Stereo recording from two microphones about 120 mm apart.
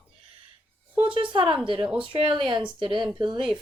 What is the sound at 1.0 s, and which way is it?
Speech, 45° right (ahead or behind).